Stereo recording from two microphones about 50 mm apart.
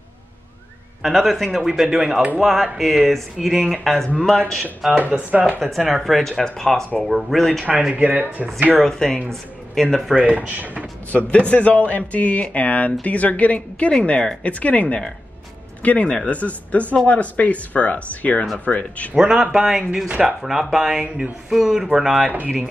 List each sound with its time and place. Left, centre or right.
1.0 s speech: centre
5.1 s speech: centre
5.8 s speech: centre
7.1 s speech: centre
7.9 s speech: right
8.8 s speech: centre
10.1 s speech: right
11.1 s speech: left
19.1 s speech: centre
20.1 s speech: right
20.4 s speech: centre